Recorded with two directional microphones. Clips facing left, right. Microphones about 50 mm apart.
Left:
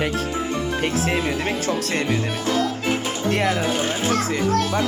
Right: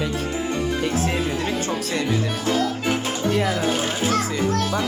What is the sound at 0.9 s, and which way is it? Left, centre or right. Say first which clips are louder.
Speech: left 1 dB; left.